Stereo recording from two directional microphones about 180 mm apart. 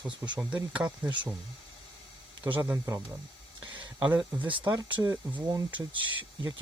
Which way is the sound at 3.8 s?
25° right (ahead or behind).